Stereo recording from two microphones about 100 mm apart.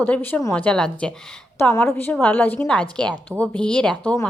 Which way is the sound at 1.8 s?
20° left (ahead or behind).